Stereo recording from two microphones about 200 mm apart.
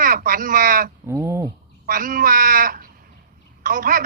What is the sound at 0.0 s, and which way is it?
Speech, 45° right (ahead or behind).